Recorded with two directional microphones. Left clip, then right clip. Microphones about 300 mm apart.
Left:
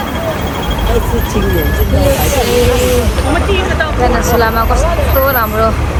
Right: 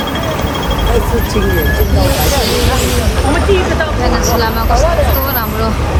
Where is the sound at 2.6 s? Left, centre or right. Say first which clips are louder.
Left 3 dB; right.